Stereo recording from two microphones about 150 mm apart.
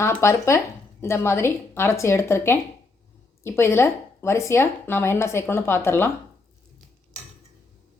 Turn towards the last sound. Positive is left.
turn(degrees=15)  # may be behind; listen again after turning